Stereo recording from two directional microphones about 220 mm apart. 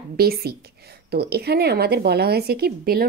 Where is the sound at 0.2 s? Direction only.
45° right (ahead or behind).